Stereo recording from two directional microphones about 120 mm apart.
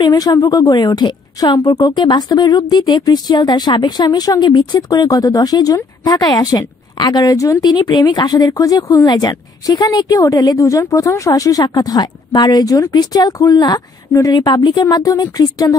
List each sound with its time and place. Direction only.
0.0 s speech: 35° left (ahead or behind)